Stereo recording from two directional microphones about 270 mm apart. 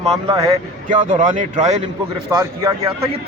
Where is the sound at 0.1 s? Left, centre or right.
Right.